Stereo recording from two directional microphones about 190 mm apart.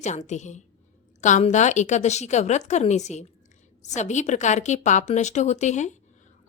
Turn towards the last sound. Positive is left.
turn(degrees=40)  # may be behind; listen again after turning